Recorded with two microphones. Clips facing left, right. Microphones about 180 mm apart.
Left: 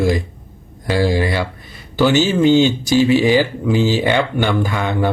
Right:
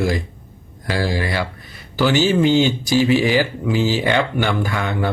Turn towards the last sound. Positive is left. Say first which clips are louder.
# left 3 dB
turn(degrees=20)  # may be behind; listen again after turning